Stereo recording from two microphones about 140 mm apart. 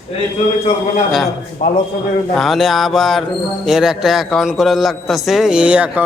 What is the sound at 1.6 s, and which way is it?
Speech, 90° left.